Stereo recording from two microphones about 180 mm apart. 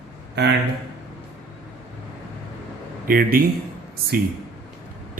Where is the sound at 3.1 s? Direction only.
55° right (ahead or behind).